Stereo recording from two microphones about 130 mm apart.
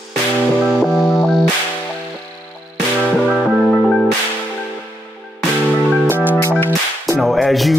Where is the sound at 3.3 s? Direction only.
5° right (ahead or behind).